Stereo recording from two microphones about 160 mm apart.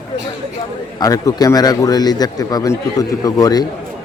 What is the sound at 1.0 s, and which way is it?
Speech, 20° left (ahead or behind).